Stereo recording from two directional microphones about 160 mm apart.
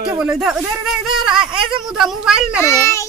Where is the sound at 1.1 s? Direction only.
5° right (ahead or behind).